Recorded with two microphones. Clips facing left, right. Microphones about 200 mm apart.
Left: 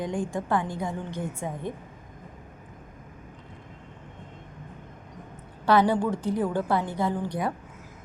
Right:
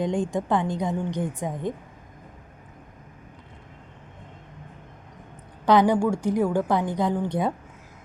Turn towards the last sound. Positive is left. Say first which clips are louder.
# right 3 dB
turn(degrees=-25)  # may be behind; listen again after turning